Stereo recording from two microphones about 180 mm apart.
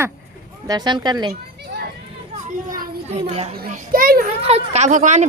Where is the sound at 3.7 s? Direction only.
50° right (ahead or behind).